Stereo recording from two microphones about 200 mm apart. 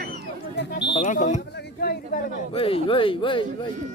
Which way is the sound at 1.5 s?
50° left (ahead or behind).